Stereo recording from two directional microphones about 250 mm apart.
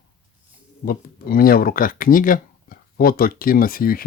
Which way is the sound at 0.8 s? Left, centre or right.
Left.